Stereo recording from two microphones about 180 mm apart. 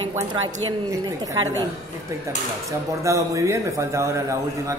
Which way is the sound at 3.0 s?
15° right (ahead or behind).